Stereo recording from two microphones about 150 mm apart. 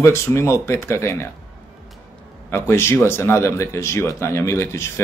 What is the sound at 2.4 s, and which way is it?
A man's voice, 15° left (ahead or behind).